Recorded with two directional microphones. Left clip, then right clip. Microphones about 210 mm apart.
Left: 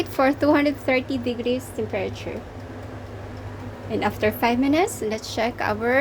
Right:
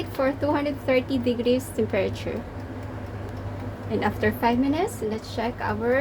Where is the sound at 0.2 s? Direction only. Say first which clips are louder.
Left 5 dB; 30° left (ahead or behind); by 2.3 s centre (ahead or behind).